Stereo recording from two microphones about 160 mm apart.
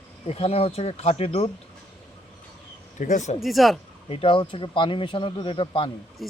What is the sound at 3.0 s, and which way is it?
Speech, 50° left (ahead or behind).